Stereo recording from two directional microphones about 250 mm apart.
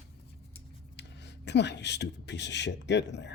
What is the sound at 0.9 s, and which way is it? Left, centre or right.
Speech, left.